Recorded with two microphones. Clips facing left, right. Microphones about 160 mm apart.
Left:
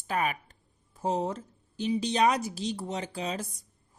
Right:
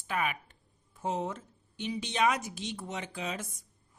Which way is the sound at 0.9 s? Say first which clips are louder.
Left 4 dB; 35° left (ahead or behind).